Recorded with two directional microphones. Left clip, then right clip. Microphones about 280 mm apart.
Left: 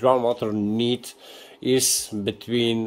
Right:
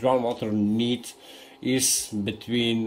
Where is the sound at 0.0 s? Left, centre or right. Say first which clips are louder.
Left 4 dB; left.